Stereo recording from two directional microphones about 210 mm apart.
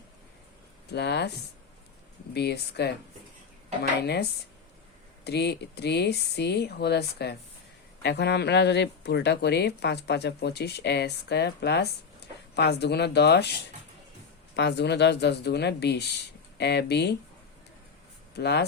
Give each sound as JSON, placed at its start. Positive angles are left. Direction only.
{"t": 0.9, "sound": "a woman's voice", "side_deg": 50}
{"t": 2.3, "sound": "a woman's voice", "side_deg": 50}
{"t": 4.0, "sound": "a woman's voice", "side_deg": 50}
{"t": 18.3, "sound": "a woman's voice", "side_deg": 55}